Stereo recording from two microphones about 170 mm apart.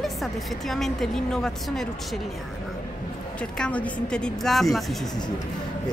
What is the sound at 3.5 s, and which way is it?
A woman's voice, 5° left (ahead or behind).